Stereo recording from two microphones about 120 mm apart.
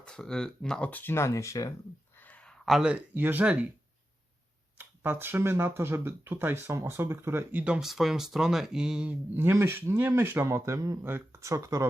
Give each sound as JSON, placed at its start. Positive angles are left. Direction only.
{"t": 0.0, "sound": "speech", "side_deg": 5}
{"t": 2.1, "sound": "speech", "side_deg": 15}
{"t": 4.8, "sound": "speech", "side_deg": -20}
{"t": 9.3, "sound": "speech", "side_deg": -20}